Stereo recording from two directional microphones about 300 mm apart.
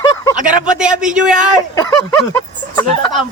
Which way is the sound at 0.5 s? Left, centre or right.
Centre.